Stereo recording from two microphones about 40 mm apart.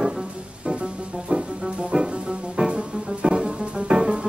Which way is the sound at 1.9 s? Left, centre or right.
Right.